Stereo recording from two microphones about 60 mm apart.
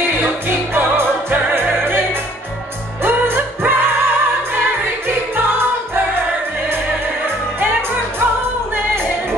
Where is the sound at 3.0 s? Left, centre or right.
Right.